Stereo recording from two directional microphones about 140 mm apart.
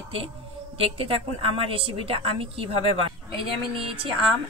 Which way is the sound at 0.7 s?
40° right (ahead or behind).